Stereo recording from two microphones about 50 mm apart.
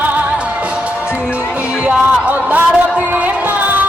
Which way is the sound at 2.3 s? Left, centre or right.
Right.